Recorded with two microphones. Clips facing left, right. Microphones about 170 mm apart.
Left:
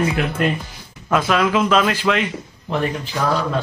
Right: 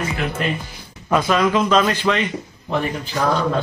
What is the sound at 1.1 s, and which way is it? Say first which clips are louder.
Speech: even; 5° left (ahead or behind).